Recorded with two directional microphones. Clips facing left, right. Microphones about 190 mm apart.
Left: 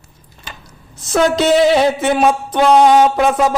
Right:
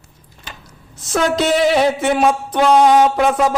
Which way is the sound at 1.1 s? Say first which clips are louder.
Left 3 dB; 25° left (ahead or behind).